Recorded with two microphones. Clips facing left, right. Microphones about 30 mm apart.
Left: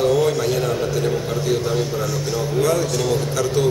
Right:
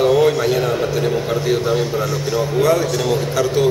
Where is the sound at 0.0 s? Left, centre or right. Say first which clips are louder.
Right 4 dB; right.